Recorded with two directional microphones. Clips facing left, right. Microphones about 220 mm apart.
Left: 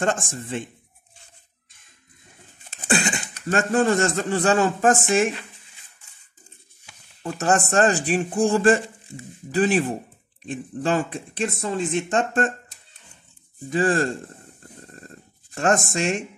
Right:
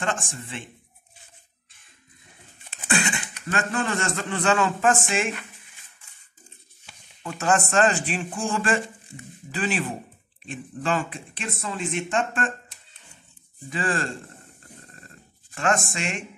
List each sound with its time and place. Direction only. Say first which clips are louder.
0.0 s speech: left 5 dB; 45° left (ahead or behind)
2.6 s speech: left 3 dB; 40° left (ahead or behind)
7.2 s speech: left 2 dB; 40° left (ahead or behind)
13.7 s speech: left 7 dB; 40° left (ahead or behind)
15.0 s a sound: left 6 dB; 45° left (ahead or behind)